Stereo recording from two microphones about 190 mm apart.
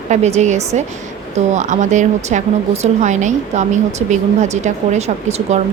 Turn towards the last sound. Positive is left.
turn(degrees=-35)  # may be behind; listen again after turning